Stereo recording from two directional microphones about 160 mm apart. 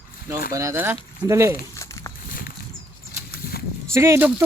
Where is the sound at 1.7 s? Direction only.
20° left (ahead or behind).